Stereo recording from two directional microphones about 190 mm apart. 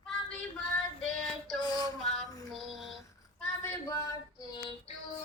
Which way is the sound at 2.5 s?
Centre (ahead or behind).